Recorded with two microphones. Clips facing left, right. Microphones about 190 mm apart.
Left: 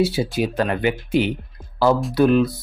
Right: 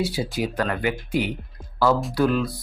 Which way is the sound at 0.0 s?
25° left (ahead or behind).